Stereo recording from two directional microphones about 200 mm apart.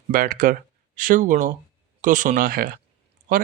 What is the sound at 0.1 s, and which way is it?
Speech, 45° right (ahead or behind).